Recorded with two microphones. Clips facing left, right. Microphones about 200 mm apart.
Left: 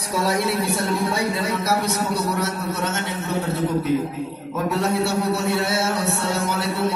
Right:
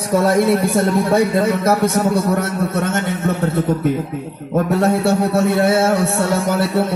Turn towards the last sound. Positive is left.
turn(degrees=-55)  # may be behind; listen again after turning